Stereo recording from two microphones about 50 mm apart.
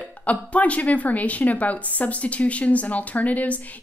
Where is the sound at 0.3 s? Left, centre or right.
Left.